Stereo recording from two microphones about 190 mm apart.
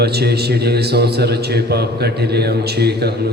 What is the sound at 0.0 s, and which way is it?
A man's voice, 60° right (ahead or behind).